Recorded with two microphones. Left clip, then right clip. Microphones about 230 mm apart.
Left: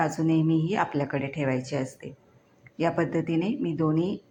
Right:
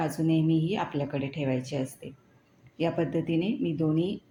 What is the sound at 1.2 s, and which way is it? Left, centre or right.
Speech, left.